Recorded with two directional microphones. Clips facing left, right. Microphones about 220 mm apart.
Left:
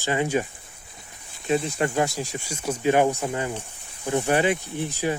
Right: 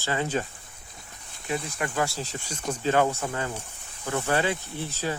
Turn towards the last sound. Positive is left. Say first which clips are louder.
# left 5 dB
turn(degrees=15)  # may be behind; listen again after turning